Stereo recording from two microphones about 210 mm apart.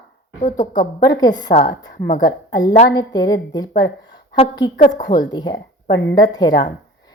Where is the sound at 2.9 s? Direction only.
20° left (ahead or behind).